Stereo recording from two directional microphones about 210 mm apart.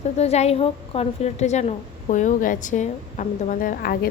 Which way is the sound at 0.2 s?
30° left (ahead or behind).